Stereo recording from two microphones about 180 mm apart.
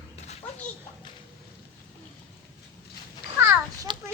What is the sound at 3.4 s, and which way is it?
Children playing, 20° right (ahead or behind).